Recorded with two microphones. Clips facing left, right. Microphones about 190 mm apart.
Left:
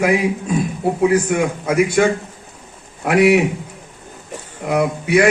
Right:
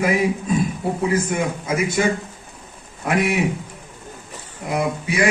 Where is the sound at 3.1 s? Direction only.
70° left (ahead or behind).